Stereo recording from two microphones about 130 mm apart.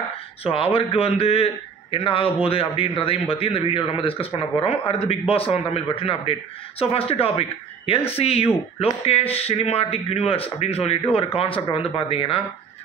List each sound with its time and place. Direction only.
0.4 s a man's voice: 45° left (ahead or behind)